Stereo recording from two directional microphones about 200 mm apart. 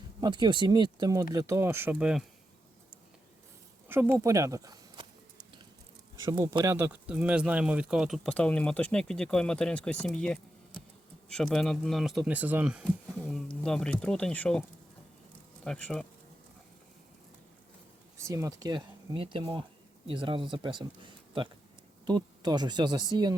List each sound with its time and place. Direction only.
0.2 s speech: 20° right (ahead or behind); by 2.2 s 5° right (ahead or behind)
3.8 s speech: 10° right (ahead or behind)
6.1 s speech: 15° right (ahead or behind)
6.7 s speech: 5° right (ahead or behind)
15.6 s speech: 5° left (ahead or behind)
18.2 s speech: 15° right (ahead or behind)